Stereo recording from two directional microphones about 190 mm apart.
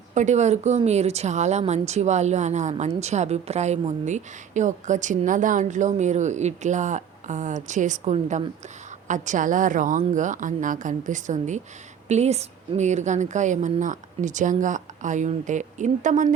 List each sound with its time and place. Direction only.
0.1 s a woman's voice: 40° right (ahead or behind)